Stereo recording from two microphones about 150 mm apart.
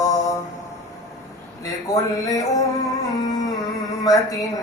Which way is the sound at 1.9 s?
25° left (ahead or behind).